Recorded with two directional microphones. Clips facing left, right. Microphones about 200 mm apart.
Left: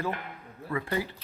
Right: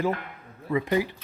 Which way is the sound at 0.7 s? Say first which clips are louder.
Right 6 dB; 20° right (ahead or behind).